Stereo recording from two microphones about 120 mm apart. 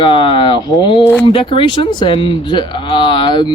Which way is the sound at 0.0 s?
45° left (ahead or behind).